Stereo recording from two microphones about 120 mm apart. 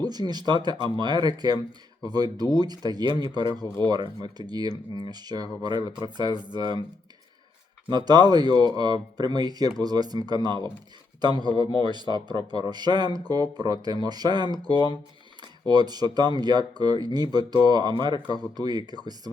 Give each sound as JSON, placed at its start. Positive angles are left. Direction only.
{"t": 0.0, "sound": "speech", "side_deg": -35}
{"t": 7.9, "sound": "speech", "side_deg": -35}